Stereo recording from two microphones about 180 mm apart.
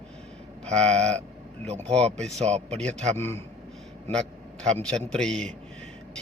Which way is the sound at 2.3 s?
40° right (ahead or behind).